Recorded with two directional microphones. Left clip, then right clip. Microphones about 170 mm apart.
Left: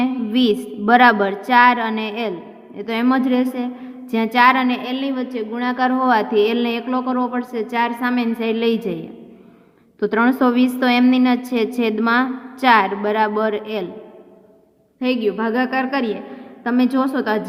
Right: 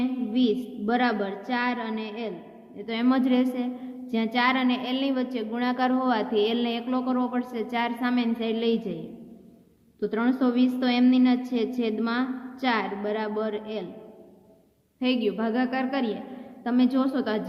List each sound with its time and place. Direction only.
0.0 s a woman's voice: 55° left (ahead or behind)
10.0 s a woman's voice: 50° left (ahead or behind)
15.0 s a woman's voice: 30° left (ahead or behind)